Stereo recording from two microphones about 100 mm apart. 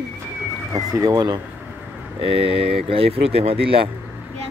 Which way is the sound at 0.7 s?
35° right (ahead or behind).